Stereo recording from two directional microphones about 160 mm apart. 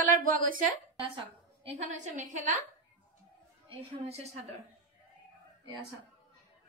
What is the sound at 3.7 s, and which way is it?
Speech, 40° right (ahead or behind).